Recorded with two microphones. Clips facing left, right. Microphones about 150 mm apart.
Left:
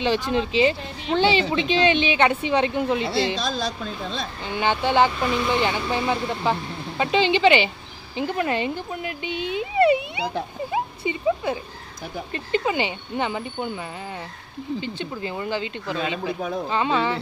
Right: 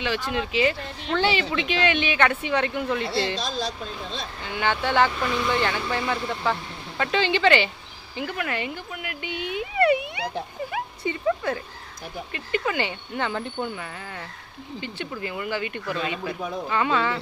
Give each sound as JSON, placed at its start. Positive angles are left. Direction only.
{"t": 0.3, "sound": "speech", "side_deg": 25}
{"t": 4.5, "sound": "speech", "side_deg": 20}
{"t": 12.3, "sound": "speech", "side_deg": 25}
{"t": 14.8, "sound": "speech", "side_deg": 20}